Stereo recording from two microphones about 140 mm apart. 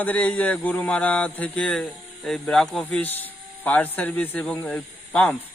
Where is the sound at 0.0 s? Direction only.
10° left (ahead or behind).